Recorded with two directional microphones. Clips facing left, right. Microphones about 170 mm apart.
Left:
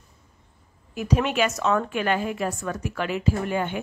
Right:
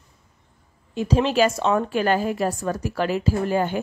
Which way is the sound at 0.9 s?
30° right (ahead or behind).